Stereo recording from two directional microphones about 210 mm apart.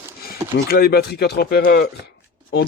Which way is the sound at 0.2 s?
45° left (ahead or behind).